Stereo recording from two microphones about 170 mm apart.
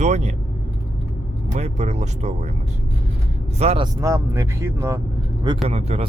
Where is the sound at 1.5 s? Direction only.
40° right (ahead or behind).